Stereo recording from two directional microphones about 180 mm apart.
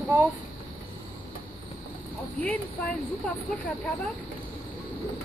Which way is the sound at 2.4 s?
10° left (ahead or behind).